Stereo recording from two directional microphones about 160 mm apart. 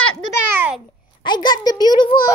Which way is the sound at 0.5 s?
10° right (ahead or behind).